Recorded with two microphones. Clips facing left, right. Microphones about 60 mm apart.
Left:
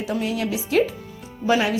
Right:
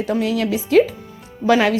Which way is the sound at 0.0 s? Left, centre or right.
Right.